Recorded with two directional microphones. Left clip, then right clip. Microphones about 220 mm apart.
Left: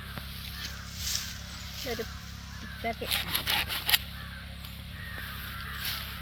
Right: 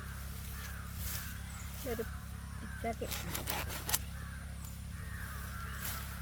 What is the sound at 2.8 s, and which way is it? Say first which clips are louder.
Speech: left 8 dB; 10° right (ahead or behind).